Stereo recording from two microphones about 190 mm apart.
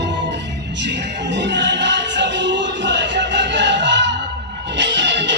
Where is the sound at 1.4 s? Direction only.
70° right (ahead or behind).